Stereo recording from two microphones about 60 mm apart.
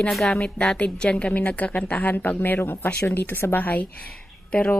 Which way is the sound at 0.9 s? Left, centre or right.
Centre.